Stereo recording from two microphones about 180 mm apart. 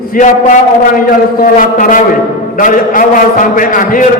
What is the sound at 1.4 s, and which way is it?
A man's voice, 50° left (ahead or behind).